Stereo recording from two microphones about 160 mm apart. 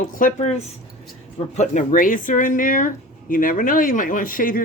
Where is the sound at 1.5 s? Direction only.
55° left (ahead or behind).